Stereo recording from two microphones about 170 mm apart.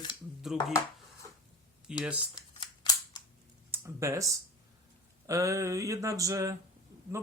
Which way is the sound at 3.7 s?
15° right (ahead or behind).